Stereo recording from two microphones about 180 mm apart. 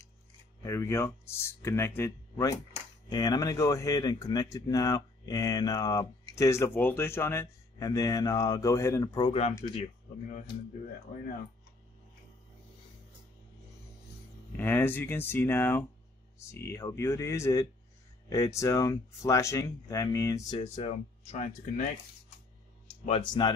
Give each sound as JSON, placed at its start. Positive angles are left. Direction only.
{"t": 0.6, "sound": "speech", "side_deg": 15}
{"t": 9.6, "sound": "speech", "side_deg": 35}
{"t": 14.6, "sound": "speech", "side_deg": 10}
{"t": 20.5, "sound": "speech", "side_deg": 35}
{"t": 23.0, "sound": "speech", "side_deg": 30}